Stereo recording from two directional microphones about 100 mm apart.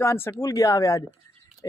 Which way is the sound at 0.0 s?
25° left (ahead or behind).